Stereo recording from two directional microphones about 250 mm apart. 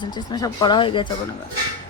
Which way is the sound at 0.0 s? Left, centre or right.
Centre.